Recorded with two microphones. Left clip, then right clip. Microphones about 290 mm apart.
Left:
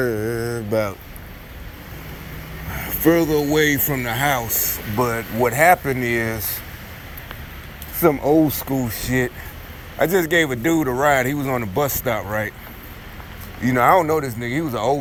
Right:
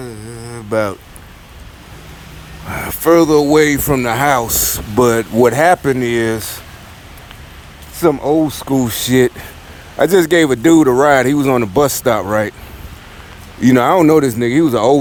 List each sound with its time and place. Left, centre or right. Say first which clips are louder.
0.0 s mantra: left 8 dB; centre
0.7 s speech: right 6 dB; right
2.7 s a sound: right 7 dB; centre
3.5 s speech: right 7 dB; centre; by 6.0 s right
6.0 s speech: right 6 dB; centre
7.9 s speech: right 3 dB; right
13.6 s speech: right 4 dB; right